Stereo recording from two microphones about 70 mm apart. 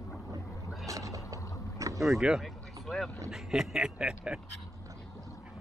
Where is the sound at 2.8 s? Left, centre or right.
Centre.